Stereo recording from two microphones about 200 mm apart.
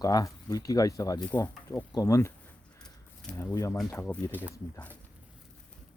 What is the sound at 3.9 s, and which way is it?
Speech, 15° left (ahead or behind).